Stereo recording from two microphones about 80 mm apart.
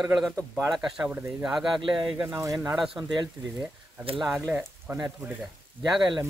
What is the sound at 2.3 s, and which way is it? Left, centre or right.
Speech, right.